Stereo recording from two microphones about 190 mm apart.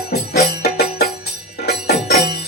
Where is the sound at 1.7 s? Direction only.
60° left (ahead or behind).